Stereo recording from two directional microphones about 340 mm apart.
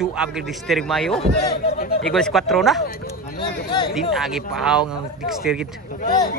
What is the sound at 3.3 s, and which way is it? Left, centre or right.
Speech, centre.